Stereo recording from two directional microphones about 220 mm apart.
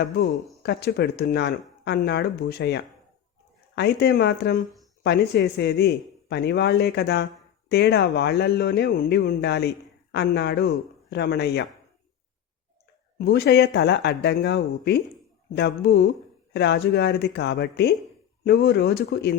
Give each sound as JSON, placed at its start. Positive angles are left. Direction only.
{"t": 0.6, "sound": "speech", "side_deg": 45}
{"t": 13.1, "sound": "speech", "side_deg": 45}